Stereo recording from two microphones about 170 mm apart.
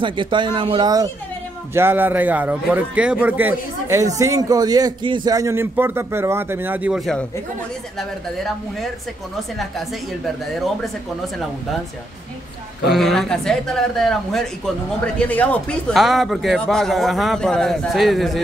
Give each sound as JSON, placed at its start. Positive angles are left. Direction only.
{"t": 0.0, "sound": "speech", "side_deg": -30}
{"t": 1.7, "sound": "a man's voice", "side_deg": -15}
{"t": 10.4, "sound": "a man's voice", "side_deg": 0}
{"t": 12.9, "sound": "a man's voice", "side_deg": 0}